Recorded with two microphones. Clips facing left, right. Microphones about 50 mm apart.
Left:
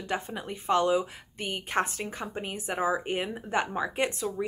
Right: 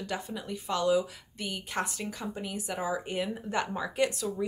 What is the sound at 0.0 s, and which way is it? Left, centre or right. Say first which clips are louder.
Speech: left 3 dB; left.